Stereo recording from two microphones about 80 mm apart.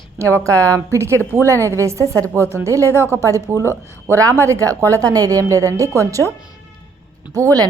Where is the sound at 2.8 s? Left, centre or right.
Left.